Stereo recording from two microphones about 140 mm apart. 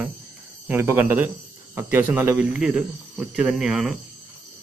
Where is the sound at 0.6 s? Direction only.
15° right (ahead or behind).